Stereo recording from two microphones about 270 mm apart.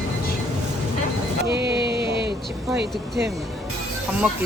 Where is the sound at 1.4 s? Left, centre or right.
Right.